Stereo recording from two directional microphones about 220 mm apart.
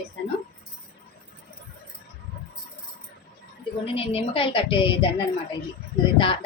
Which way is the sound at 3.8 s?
25° left (ahead or behind).